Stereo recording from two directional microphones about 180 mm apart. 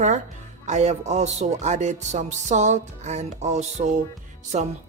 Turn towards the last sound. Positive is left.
turn(degrees=-40)  # may be behind; listen again after turning